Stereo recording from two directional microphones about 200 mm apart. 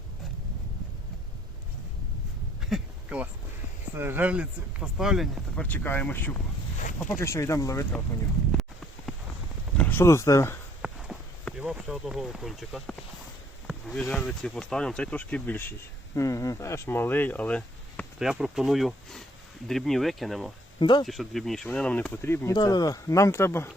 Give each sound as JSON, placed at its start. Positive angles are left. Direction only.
{"t": 2.6, "sound": "a sound", "side_deg": 0}
{"t": 3.9, "sound": "speech", "side_deg": -10}
{"t": 9.7, "sound": "speech", "side_deg": 10}
{"t": 10.8, "sound": "a sound", "side_deg": -5}
{"t": 13.7, "sound": "speech", "side_deg": 0}
{"t": 18.2, "sound": "speech", "side_deg": 0}
{"t": 20.7, "sound": "speech", "side_deg": 20}
{"t": 21.0, "sound": "speech", "side_deg": 0}